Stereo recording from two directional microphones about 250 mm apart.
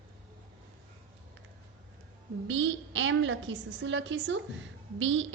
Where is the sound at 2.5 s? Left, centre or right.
Right.